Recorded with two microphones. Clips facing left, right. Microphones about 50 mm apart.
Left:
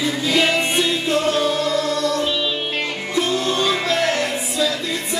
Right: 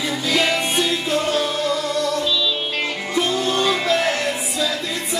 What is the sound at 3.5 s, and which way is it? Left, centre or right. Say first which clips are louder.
Music: right 1 dB; centre.